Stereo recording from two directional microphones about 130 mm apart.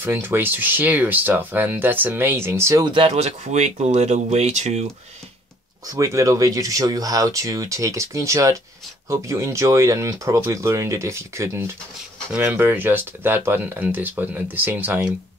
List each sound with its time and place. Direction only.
0.0 s speech: 15° right (ahead or behind)
2.8 s speech: 45° right (ahead or behind); by 4.8 s 60° right (ahead or behind)
5.9 s speech: 25° right (ahead or behind)